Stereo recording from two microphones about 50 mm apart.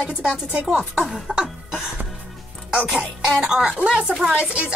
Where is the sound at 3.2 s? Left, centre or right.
Centre.